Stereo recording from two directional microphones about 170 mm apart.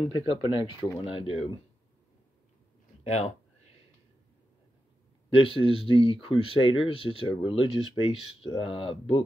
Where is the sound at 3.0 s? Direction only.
40° left (ahead or behind).